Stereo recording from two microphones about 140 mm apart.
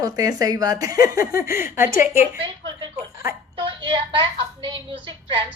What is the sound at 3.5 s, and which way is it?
A woman's voice, 35° right (ahead or behind).